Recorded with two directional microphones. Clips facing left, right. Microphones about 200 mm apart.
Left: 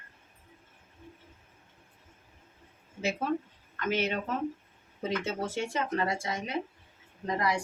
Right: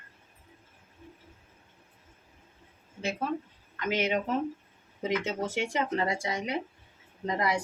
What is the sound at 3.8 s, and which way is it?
A woman's voice, 15° right (ahead or behind).